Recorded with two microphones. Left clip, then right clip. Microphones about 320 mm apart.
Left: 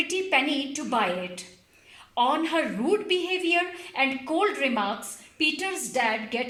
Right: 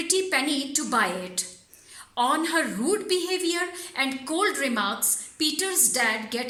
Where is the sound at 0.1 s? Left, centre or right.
Centre.